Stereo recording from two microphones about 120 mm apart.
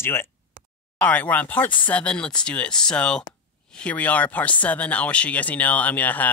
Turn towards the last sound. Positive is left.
turn(degrees=15)  # may be behind; listen again after turning